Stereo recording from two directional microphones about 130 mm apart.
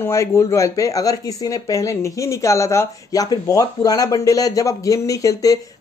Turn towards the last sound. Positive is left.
turn(degrees=25)  # may be behind; listen again after turning